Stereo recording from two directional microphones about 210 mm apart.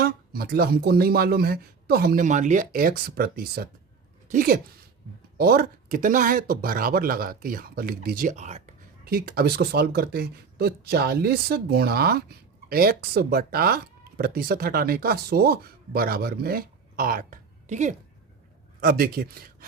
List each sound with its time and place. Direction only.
0.0 s speech: 45° right (ahead or behind)
9.0 s a man's voice: 45° right (ahead or behind)